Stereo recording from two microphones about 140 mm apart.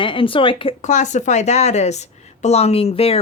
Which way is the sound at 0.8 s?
60° left (ahead or behind).